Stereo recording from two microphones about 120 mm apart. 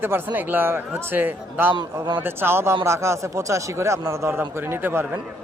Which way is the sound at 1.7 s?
35° right (ahead or behind).